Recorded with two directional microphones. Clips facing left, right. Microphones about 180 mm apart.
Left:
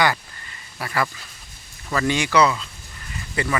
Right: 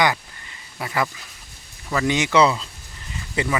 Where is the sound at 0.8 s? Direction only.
15° right (ahead or behind).